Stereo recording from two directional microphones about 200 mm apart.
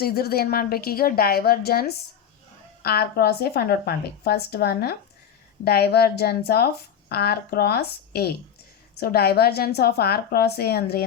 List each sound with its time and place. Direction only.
0.0 s a woman's voice: 50° left (ahead or behind)